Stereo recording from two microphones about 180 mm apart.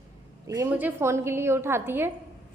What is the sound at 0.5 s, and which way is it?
A woman's voice, 10° right (ahead or behind).